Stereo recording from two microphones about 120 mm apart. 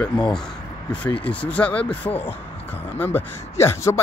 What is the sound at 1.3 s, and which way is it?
Speech, 10° left (ahead or behind).